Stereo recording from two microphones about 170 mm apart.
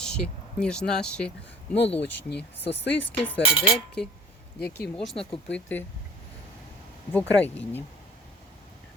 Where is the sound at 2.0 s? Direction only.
85° left.